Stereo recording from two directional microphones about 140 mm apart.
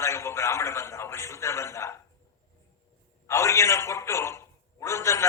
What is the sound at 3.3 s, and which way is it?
A man's voice, 20° left (ahead or behind).